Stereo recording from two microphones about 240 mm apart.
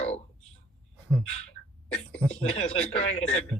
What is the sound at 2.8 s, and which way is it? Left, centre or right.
Speech, left.